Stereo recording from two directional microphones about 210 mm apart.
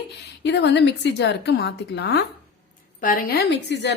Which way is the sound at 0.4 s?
55° left (ahead or behind).